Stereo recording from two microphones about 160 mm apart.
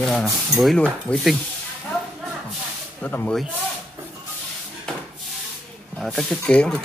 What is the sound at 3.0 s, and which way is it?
Speech, 10° left (ahead or behind).